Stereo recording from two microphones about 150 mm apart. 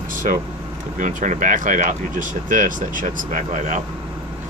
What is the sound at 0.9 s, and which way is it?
Speech, 60° right (ahead or behind).